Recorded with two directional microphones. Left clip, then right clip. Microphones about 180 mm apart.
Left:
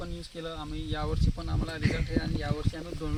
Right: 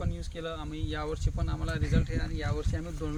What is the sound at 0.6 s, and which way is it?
Speech, 10° right (ahead or behind).